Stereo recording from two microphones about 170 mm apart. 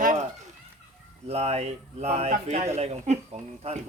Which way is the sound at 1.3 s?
40° right (ahead or behind).